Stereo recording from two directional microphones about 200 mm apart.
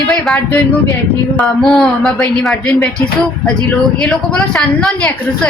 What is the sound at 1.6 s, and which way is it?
Speech, centre (ahead or behind).